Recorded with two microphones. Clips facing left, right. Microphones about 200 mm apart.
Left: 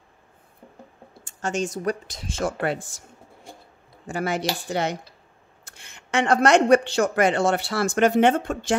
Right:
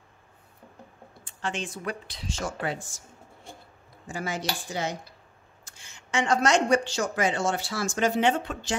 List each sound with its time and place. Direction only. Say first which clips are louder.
1.2 s speech: left 6 dB; 45° left (ahead or behind); by 3.0 s 60° left (ahead or behind)
4.1 s speech: left 6 dB; 65° left (ahead or behind)